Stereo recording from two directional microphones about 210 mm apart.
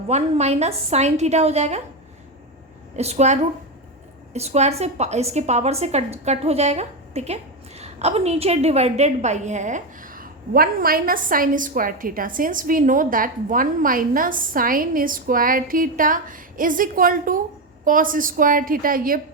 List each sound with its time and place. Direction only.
0.1 s a woman's voice: 30° right (ahead or behind)
2.9 s a woman's voice: 30° right (ahead or behind)